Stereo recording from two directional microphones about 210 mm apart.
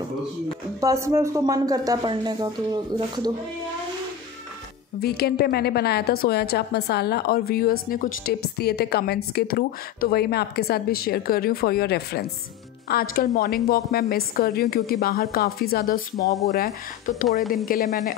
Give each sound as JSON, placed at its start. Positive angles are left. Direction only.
{"t": 0.7, "sound": "speech", "side_deg": -15}
{"t": 5.0, "sound": "a woman's voice", "side_deg": 50}